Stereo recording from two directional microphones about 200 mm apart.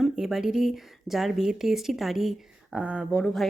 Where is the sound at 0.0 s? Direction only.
Centre (ahead or behind).